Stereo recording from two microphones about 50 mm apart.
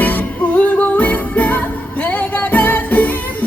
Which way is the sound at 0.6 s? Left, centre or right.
Left.